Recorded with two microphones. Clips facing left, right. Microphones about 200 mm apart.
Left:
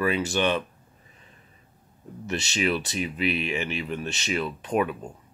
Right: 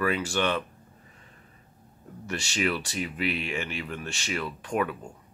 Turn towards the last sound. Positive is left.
turn(degrees=20)  # may be behind; listen again after turning